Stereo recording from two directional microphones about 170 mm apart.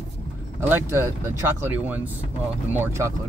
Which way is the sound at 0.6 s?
15° right (ahead or behind).